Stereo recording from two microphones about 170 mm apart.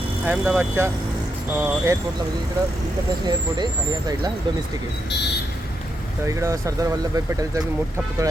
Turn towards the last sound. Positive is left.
turn(degrees=-20)  # may be behind; listen again after turning